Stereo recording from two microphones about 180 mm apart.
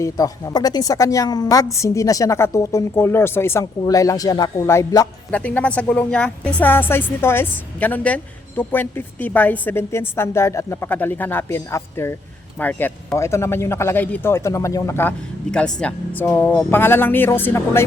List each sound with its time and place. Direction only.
0.0 s a woman's voice: 20° left (ahead or behind)
15.5 s a woman's voice: 5° left (ahead or behind)